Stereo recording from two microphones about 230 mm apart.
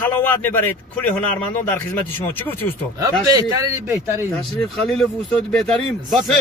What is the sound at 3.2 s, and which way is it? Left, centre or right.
A man's voice, centre.